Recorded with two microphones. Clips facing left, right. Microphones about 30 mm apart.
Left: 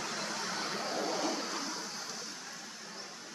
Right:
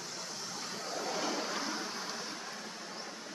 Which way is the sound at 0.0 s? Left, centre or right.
Left.